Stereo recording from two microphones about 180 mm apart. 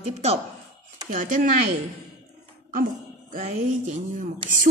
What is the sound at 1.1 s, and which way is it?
Speech, 45° right (ahead or behind).